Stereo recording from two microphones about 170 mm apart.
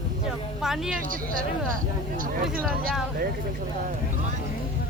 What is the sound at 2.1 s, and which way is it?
Speech, 55° right (ahead or behind).